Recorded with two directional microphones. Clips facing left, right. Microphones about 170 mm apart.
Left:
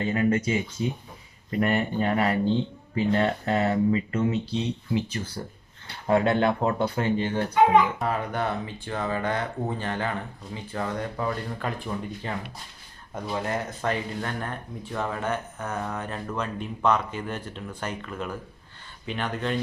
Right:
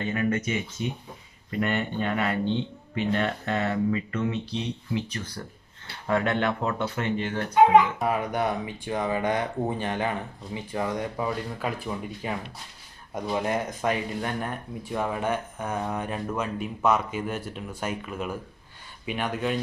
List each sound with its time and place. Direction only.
0.0 s speech: 30° left (ahead or behind)
8.0 s speech: 15° right (ahead or behind)